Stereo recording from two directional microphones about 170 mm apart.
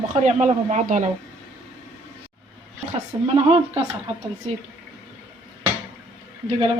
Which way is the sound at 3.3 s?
35° right (ahead or behind).